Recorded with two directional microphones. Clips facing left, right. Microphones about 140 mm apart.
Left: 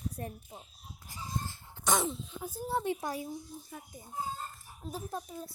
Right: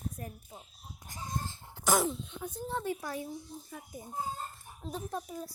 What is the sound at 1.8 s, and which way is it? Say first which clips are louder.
Speech: right 2 dB; centre (ahead or behind).